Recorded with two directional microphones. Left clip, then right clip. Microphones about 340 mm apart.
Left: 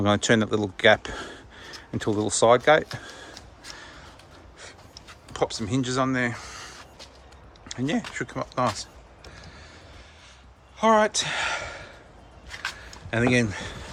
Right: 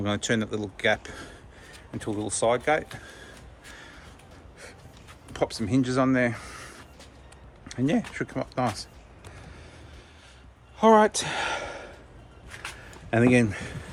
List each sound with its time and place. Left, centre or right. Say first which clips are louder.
0.0 s speech: left 6 dB; centre
5.3 s speech: even; centre
10.8 s a sound: right 1 dB; centre